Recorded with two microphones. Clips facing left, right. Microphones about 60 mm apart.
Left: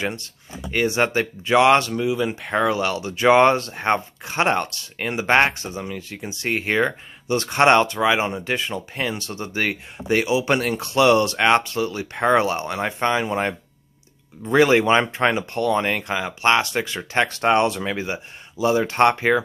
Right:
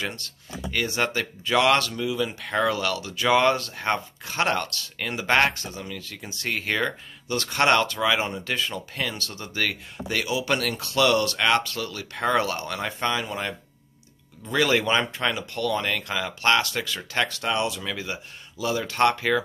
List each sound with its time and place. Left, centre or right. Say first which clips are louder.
0.0 s speech: left 5 dB; left
17.9 s speech: left 5 dB; left